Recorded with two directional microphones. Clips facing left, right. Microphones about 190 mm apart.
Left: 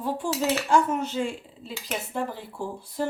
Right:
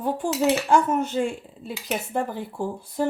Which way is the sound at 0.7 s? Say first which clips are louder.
Right 2 dB; 50° right (ahead or behind).